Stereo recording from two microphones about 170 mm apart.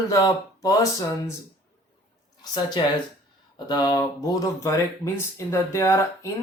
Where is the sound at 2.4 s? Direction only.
25° left (ahead or behind).